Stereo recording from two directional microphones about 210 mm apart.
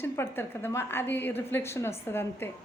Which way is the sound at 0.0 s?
10° left (ahead or behind).